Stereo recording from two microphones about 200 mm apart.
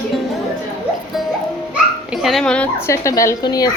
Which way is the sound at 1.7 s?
5° right (ahead or behind).